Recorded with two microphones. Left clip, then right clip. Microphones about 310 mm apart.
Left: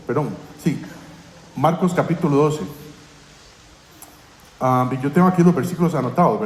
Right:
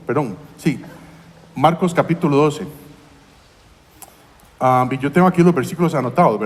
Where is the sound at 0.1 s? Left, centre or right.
Right.